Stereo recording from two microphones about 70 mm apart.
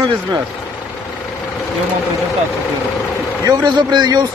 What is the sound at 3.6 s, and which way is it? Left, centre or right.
Speech, right.